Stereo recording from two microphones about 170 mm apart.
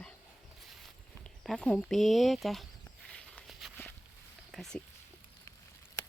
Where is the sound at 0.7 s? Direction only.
Centre (ahead or behind).